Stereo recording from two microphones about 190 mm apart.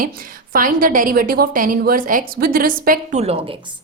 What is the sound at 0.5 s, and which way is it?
A woman's voice, 45° right (ahead or behind).